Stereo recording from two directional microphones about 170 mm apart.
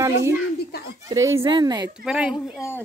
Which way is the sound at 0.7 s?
70° left (ahead or behind).